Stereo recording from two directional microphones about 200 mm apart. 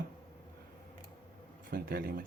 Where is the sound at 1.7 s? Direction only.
45° right (ahead or behind).